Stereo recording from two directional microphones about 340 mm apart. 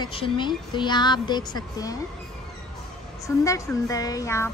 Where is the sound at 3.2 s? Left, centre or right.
Centre.